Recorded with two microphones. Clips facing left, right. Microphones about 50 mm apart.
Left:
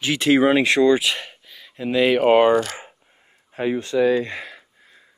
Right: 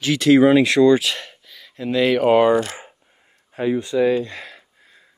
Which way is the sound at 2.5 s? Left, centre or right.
Left.